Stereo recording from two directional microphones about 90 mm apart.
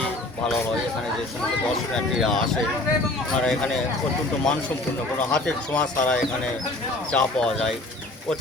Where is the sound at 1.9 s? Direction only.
5° left (ahead or behind).